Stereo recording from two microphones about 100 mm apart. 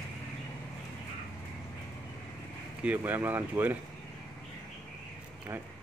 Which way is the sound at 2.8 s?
15° right (ahead or behind).